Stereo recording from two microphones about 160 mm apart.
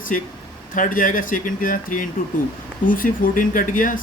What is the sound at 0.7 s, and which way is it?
Speech, 55° left (ahead or behind).